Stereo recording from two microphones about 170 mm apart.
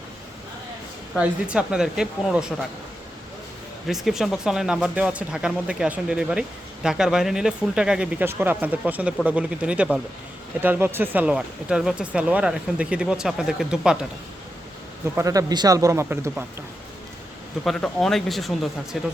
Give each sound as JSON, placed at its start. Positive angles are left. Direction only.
{"t": 1.2, "sound": "speech", "side_deg": -5}
{"t": 3.8, "sound": "a man's voice", "side_deg": 0}
{"t": 15.1, "sound": "speech", "side_deg": -20}
{"t": 17.6, "sound": "speech", "side_deg": 5}